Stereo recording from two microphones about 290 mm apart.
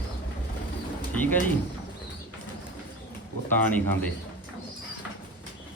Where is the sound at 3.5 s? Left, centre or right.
Centre.